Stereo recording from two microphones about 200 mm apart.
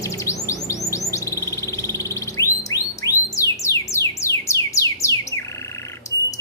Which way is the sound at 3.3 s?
15° left (ahead or behind).